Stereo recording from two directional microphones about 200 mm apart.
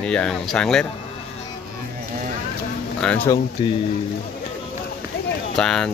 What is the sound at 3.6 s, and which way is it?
Speech, 20° left (ahead or behind).